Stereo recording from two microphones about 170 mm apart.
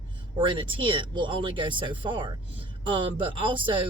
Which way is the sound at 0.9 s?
30° right (ahead or behind).